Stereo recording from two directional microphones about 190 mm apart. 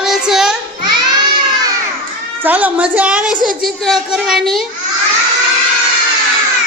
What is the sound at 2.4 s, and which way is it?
A woman's voice, 10° right (ahead or behind).